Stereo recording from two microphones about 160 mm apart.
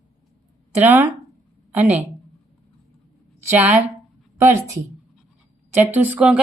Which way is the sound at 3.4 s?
10° right (ahead or behind).